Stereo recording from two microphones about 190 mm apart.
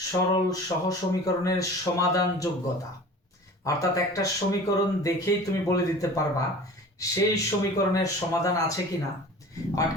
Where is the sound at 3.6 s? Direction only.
15° left (ahead or behind).